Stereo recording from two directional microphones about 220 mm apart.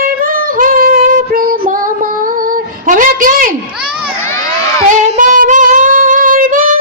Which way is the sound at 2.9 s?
35° right (ahead or behind).